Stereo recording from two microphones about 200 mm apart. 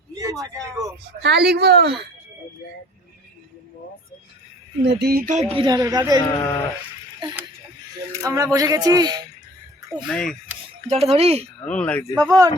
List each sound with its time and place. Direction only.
0.1 s speech: 15° right (ahead or behind)
1.2 s speech: 55° right (ahead or behind)
4.9 s speech: 50° right (ahead or behind)
5.5 s speech: 20° right (ahead or behind)
6.1 s speech: 20° left (ahead or behind)
8.1 s speech: 15° right (ahead or behind)
10.1 s speech: 5° left (ahead or behind)
10.8 s speech: 30° right (ahead or behind)
11.6 s speech: 5° left (ahead or behind)